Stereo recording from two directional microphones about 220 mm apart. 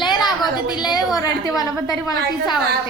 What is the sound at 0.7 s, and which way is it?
Speech, 20° left (ahead or behind).